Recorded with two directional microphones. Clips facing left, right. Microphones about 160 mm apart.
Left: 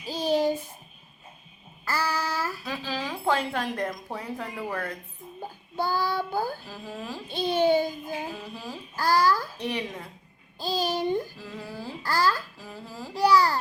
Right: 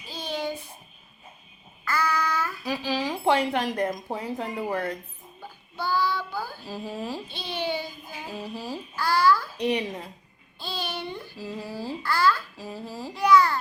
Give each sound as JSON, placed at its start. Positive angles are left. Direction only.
{"t": 0.0, "sound": "a sound", "side_deg": 40}
{"t": 1.8, "sound": "child singing", "side_deg": 35}
{"t": 2.6, "sound": "a woman's voice", "side_deg": -15}
{"t": 5.4, "sound": "a child's voice", "side_deg": 45}
{"t": 6.7, "sound": "a woman's voice", "side_deg": -15}
{"t": 7.3, "sound": "child singing", "side_deg": 45}
{"t": 9.6, "sound": "a woman's voice", "side_deg": -20}
{"t": 10.6, "sound": "a child's voice", "side_deg": 40}
{"t": 11.3, "sound": "a woman's voice", "side_deg": -10}
{"t": 12.0, "sound": "a child's voice", "side_deg": 40}
{"t": 12.5, "sound": "a woman's voice", "side_deg": -15}
{"t": 13.1, "sound": "a child's voice", "side_deg": 35}